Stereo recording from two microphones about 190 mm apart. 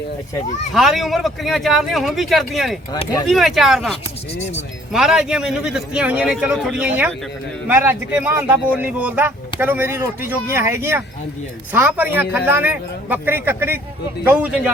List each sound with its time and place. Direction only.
0.7 s a man's voice: centre (ahead or behind)
2.9 s speech: 20° left (ahead or behind)
3.2 s a man's voice: centre (ahead or behind)